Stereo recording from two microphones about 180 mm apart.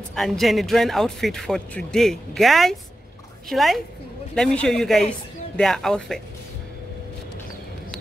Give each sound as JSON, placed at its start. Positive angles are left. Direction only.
{"t": 0.1, "sound": "speech", "side_deg": 0}